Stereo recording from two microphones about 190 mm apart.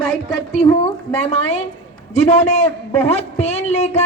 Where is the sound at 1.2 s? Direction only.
35° left (ahead or behind).